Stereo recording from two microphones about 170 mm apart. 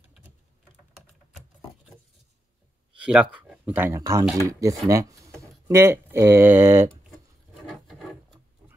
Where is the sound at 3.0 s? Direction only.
5° right (ahead or behind).